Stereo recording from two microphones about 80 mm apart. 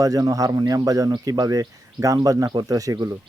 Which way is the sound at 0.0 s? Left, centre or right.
Right.